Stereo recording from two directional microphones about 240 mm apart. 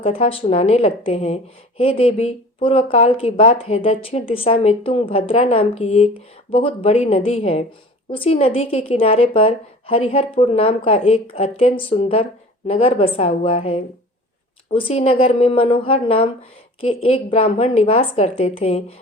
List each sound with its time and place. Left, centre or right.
0.0 s speech: left